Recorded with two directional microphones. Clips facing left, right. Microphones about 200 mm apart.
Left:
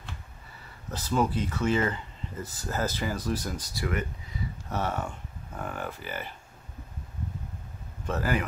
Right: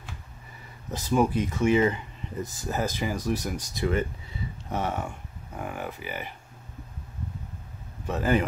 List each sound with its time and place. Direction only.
0.9 s speech: 15° right (ahead or behind)
8.1 s speech: 25° right (ahead or behind)